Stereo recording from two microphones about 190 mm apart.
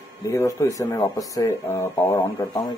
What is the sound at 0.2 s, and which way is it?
Speech, 15° left (ahead or behind).